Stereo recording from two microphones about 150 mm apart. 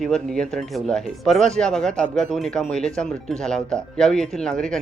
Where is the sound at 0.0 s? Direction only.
5° left (ahead or behind).